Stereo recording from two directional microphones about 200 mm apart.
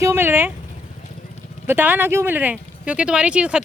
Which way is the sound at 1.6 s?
10° right (ahead or behind).